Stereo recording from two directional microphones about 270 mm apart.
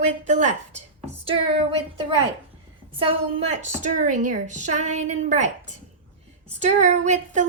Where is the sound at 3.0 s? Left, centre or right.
Right.